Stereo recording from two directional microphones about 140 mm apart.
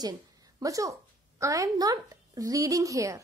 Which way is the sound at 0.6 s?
25° right (ahead or behind).